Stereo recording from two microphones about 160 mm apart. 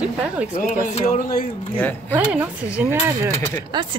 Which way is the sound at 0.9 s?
55° left (ahead or behind).